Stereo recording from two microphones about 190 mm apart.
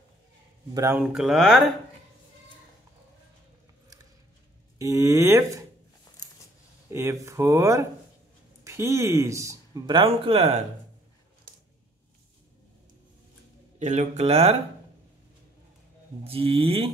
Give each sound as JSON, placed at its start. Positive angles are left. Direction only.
{"t": 0.7, "sound": "speech", "side_deg": -10}
{"t": 4.7, "sound": "speech", "side_deg": -15}
{"t": 6.9, "sound": "speech", "side_deg": -15}
{"t": 13.7, "sound": "speech", "side_deg": -40}
{"t": 16.3, "sound": "speech", "side_deg": -30}